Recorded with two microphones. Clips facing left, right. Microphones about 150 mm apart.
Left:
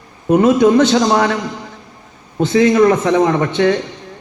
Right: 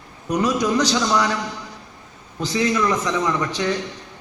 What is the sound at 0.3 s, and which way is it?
Speech, 25° left (ahead or behind).